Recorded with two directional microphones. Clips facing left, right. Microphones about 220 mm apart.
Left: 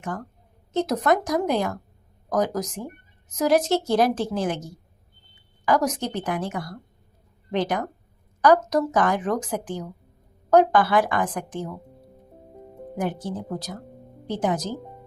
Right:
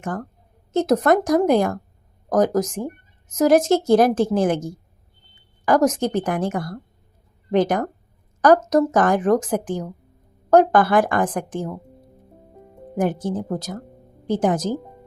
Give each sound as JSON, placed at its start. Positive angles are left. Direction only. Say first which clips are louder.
{"t": 0.7, "sound": "a woman's voice", "louder": "right 5 dB", "side_deg": -50}
{"t": 13.0, "sound": "speech", "louder": "right 6 dB", "side_deg": -50}